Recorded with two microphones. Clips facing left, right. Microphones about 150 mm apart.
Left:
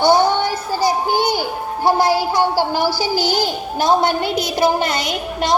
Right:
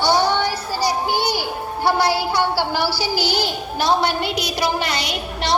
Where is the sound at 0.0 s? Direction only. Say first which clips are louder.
Left 4 dB; 50° left (ahead or behind).